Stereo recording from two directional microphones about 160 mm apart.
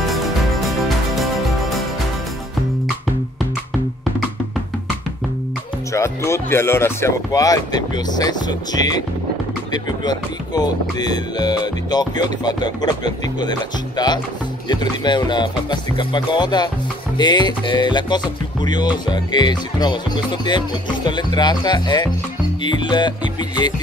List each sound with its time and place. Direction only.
0.0 s music: centre (ahead or behind)
5.9 s music: 15° left (ahead or behind)
10.0 s music: 25° left (ahead or behind)